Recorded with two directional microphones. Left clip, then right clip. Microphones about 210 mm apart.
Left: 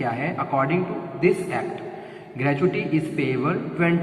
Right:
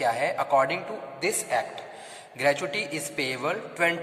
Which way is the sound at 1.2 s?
60° right (ahead or behind).